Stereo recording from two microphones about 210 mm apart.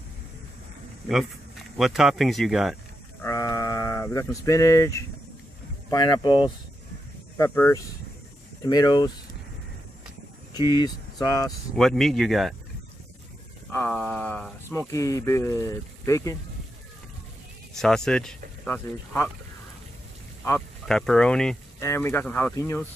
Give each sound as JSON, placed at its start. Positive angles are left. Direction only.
{"t": 1.8, "sound": "speech", "side_deg": 0}
{"t": 3.2, "sound": "sheep", "side_deg": 15}
{"t": 5.9, "sound": "speech", "side_deg": 20}
{"t": 7.3, "sound": "speech", "side_deg": 10}
{"t": 10.7, "sound": "speech", "side_deg": 20}
{"t": 11.7, "sound": "speech", "side_deg": 0}
{"t": 13.7, "sound": "speech", "side_deg": 5}
{"t": 17.7, "sound": "speech", "side_deg": 5}
{"t": 20.8, "sound": "speech", "side_deg": 0}